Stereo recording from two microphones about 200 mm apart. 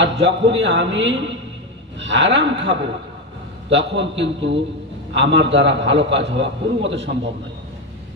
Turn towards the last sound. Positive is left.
turn(degrees=-65)  # may be behind; listen again after turning